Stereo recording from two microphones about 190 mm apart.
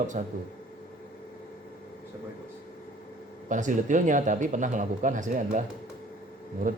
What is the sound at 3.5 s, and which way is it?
Speech, 40° right (ahead or behind).